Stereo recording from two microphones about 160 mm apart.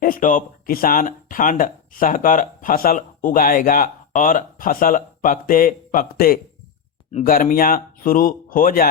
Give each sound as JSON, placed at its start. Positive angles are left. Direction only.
{"t": 0.0, "sound": "speech", "side_deg": 60}